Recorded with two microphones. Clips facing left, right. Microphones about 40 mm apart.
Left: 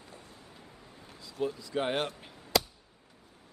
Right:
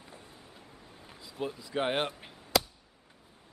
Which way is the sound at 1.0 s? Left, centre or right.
Centre.